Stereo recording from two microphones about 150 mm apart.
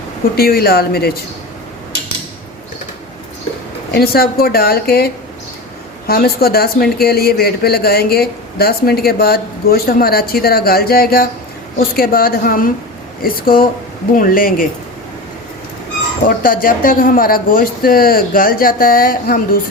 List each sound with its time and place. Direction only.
0.3 s speech: 90° left
3.9 s speech: 90° left
11.8 s speech: 80° left
16.2 s speech: 70° left (ahead or behind)